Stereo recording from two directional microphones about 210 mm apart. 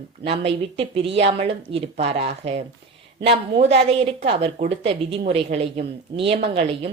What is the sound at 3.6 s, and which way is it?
A woman's voice, 30° right (ahead or behind).